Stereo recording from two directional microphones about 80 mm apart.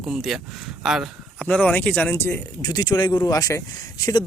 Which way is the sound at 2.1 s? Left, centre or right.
Left.